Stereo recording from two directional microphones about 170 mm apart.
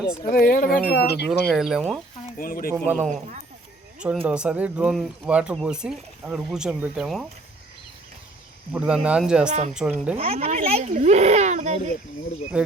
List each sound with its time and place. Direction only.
0.3 s speech: 60° left (ahead or behind)
0.9 s speech: 70° left (ahead or behind)
1.5 s speech: 5° right (ahead or behind)
2.4 s speech: 55° left (ahead or behind)
2.7 s speech: 5° right (ahead or behind)
8.7 s speech: 5° right (ahead or behind)
9.5 s speech: 45° right (ahead or behind)
9.7 s speech: 5° right (ahead or behind)
10.2 s speech: 35° right (ahead or behind)
12.5 s cricket: 5° right (ahead or behind)